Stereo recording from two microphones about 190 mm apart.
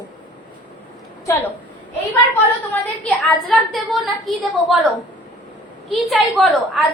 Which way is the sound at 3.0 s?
5° left (ahead or behind).